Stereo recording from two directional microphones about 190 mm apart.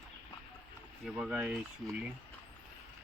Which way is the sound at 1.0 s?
5° right (ahead or behind).